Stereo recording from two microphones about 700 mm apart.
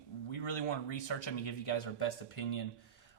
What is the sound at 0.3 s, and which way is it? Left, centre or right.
Speech, left.